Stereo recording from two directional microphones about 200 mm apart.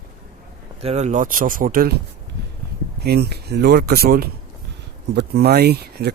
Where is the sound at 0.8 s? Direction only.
35° right (ahead or behind).